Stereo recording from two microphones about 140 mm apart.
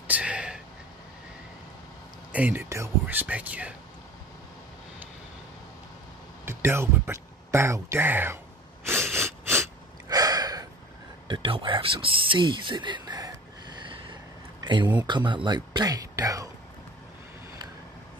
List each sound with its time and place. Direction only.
0.1 s a sound: 10° right (ahead or behind)
2.3 s speech: 15° right (ahead or behind)
6.4 s speech: 15° right (ahead or behind)
8.8 s sneeze: 20° right (ahead or behind)
11.2 s speech: 35° right (ahead or behind)
14.6 s a sound: 35° right (ahead or behind)
15.0 s speech: 35° right (ahead or behind)